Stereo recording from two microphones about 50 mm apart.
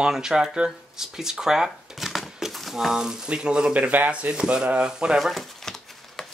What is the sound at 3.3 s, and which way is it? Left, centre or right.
Speech, centre.